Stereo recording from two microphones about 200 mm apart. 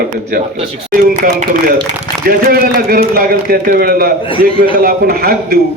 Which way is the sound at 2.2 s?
50° right (ahead or behind).